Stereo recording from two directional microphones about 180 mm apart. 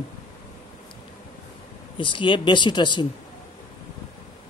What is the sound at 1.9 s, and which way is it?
A man's voice, 25° left (ahead or behind).